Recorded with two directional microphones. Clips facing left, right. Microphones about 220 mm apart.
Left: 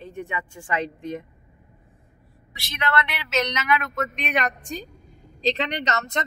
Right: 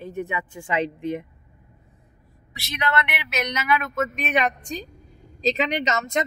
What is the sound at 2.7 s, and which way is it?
Speech, 20° right (ahead or behind).